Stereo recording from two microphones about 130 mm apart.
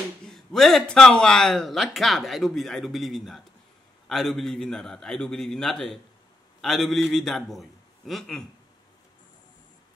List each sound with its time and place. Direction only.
0.3 s a man's voice: centre (ahead or behind)